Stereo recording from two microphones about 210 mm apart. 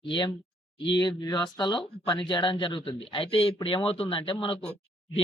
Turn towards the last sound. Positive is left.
turn(degrees=25)  # may be behind; listen again after turning